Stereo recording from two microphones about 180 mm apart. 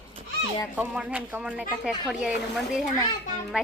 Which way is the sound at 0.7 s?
5° right (ahead or behind).